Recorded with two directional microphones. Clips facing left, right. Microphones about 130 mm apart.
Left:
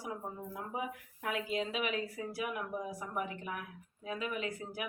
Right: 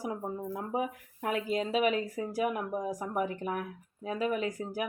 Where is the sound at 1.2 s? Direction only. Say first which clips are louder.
Right 5 dB; 40° right (ahead or behind).